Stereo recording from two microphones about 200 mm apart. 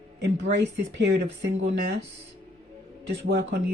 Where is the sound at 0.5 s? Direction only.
60° right (ahead or behind).